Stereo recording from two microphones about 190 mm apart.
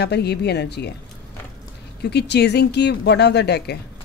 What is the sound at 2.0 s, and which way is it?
A woman's voice, 60° left (ahead or behind).